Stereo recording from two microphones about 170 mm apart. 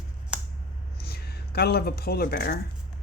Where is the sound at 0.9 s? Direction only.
65° left (ahead or behind).